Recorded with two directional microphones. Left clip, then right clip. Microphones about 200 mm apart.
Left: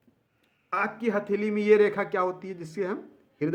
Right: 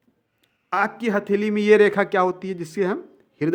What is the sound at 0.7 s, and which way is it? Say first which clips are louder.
A man's voice: right 5 dB; 45° right (ahead or behind).